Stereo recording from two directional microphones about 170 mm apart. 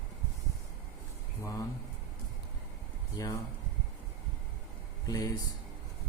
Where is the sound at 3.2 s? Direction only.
20° left (ahead or behind).